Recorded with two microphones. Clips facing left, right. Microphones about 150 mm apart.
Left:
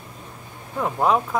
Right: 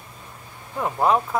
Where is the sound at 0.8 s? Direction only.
Centre (ahead or behind).